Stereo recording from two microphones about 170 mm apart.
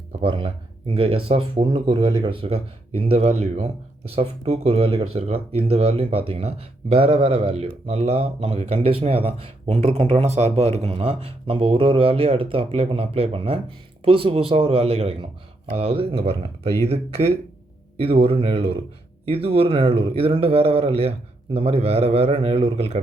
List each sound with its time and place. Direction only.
0.2 s speech: 30° right (ahead or behind)
18.0 s speech: 35° right (ahead or behind)